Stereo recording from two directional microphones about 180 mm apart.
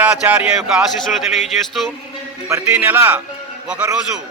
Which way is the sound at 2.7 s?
10° right (ahead or behind).